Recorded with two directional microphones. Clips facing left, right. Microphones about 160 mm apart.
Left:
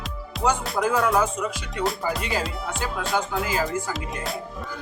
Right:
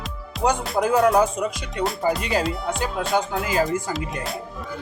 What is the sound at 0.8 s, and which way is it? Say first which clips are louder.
Music: right 5 dB; 30° right (ahead or behind).